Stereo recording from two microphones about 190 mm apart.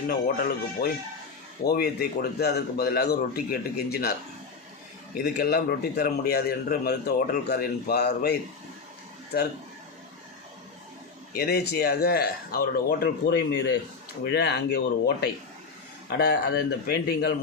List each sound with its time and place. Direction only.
0.1 s a man's voice: 50° left (ahead or behind)
5.1 s a man's voice: 55° left (ahead or behind)
11.3 s a man's voice: 55° left (ahead or behind)